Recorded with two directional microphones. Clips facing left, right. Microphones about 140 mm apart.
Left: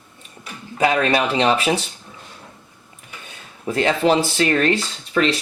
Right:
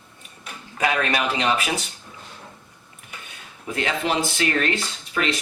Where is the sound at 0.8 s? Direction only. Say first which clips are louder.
Left 5 dB; 30° left (ahead or behind).